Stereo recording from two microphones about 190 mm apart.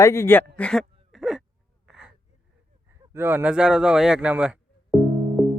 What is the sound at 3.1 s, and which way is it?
Speech, 10° right (ahead or behind).